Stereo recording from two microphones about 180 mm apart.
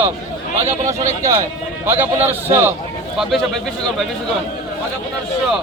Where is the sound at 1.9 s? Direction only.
10° right (ahead or behind).